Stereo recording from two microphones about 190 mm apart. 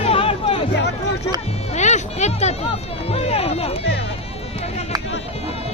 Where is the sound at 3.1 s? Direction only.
30° left (ahead or behind).